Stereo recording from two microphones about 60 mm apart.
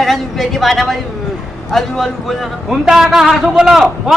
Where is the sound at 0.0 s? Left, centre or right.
Centre.